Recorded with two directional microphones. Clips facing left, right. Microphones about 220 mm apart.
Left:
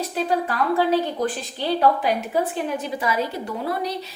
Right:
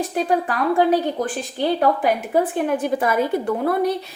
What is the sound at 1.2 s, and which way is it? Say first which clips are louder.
A woman's voice: right 2 dB; 50° right (ahead or behind).